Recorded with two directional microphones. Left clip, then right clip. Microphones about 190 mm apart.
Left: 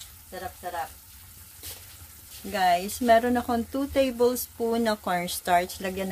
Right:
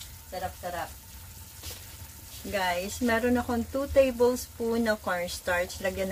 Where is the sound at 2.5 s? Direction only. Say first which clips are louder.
Left 5 dB; 60° left (ahead or behind).